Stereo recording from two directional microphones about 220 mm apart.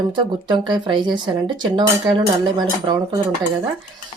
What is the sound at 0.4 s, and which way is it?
Speech, 20° right (ahead or behind).